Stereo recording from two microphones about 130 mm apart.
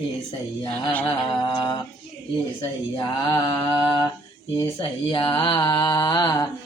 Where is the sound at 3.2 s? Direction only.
35° left (ahead or behind).